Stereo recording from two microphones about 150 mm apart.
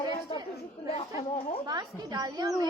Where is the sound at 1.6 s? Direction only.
25° right (ahead or behind).